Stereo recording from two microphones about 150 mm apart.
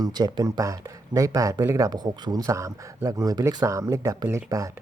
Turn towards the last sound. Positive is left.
turn(degrees=-20)  # may be behind; listen again after turning